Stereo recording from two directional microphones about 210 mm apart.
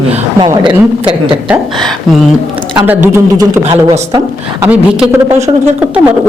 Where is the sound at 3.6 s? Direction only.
25° right (ahead or behind).